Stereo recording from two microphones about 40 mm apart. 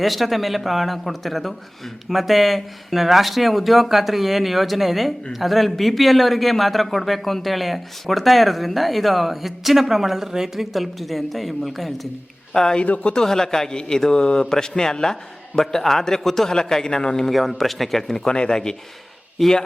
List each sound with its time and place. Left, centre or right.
0.0 s speech: centre
12.5 s a man's voice: centre
12.8 s speech: left
13.1 s a man's voice: centre
17.2 s speech: centre
18.3 s speech: left
19.4 s speech: centre